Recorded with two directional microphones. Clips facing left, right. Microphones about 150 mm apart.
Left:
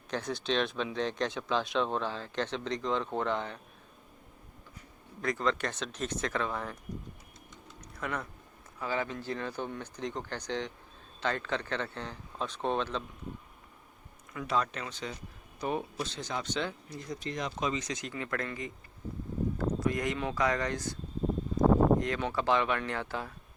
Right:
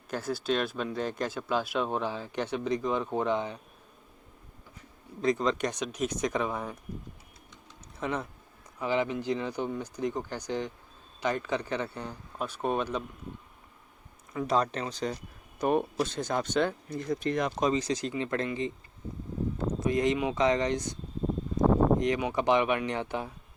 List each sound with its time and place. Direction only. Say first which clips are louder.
0.1 s speech: right 2 dB; 5° right (ahead or behind)
5.2 s speech: right 4 dB; 20° right (ahead or behind)
7.9 s speech: right 4 dB; 20° right (ahead or behind)
14.3 s speech: right 4 dB; 35° right (ahead or behind)
15.6 s speech: right 7 dB; 55° right (ahead or behind)
17.6 s speech: right 6 dB; 35° right (ahead or behind)
18.1 s speech: right 5 dB; 25° right (ahead or behind)